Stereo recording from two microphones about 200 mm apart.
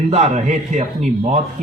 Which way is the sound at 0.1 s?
35° right (ahead or behind).